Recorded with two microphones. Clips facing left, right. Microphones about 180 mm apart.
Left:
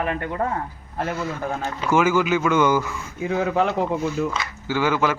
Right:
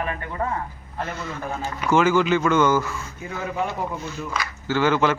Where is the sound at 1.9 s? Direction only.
10° left (ahead or behind).